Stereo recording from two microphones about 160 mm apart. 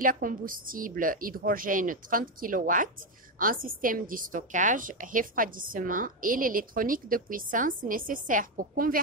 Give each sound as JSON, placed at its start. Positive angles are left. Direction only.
{"t": 0.0, "sound": "a woman's voice", "side_deg": -60}